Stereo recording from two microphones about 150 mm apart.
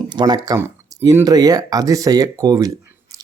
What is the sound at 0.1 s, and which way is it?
Speech, 30° right (ahead or behind).